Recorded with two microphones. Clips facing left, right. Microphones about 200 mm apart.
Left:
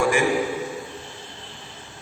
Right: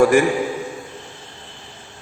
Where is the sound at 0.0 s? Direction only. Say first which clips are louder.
Right 7 dB; 45° right (ahead or behind).